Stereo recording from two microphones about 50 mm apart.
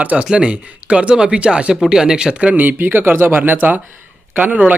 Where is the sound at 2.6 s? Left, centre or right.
Right.